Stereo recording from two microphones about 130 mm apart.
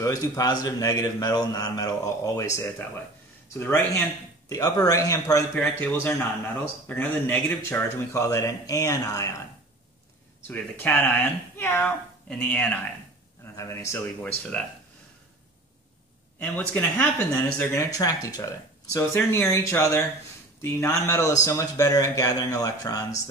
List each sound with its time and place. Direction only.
0.0 s speech: 25° left (ahead or behind)
10.5 s speech: 15° left (ahead or behind)
14.2 s speech: 10° left (ahead or behind)
16.5 s speech: 15° left (ahead or behind)
17.6 s speech: 25° left (ahead or behind)